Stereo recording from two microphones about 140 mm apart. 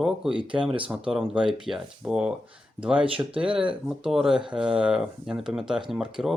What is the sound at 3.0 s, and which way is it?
Speech, 40° right (ahead or behind).